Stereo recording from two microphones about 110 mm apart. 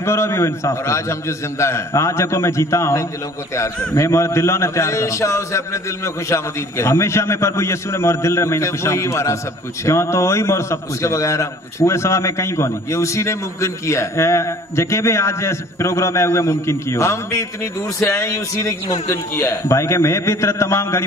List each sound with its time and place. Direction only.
0.0 s a man's voice: 25° left (ahead or behind)